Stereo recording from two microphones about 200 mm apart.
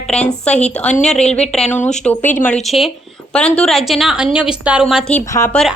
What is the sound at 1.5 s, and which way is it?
A woman's voice, centre (ahead or behind).